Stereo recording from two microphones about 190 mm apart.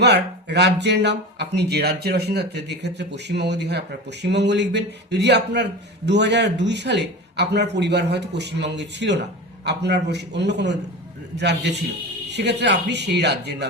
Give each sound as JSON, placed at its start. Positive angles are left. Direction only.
{"t": 0.0, "sound": "speech", "side_deg": -65}